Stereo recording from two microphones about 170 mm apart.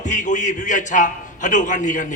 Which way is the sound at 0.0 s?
45° left (ahead or behind).